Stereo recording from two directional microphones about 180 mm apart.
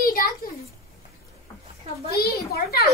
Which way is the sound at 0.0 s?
55° left (ahead or behind).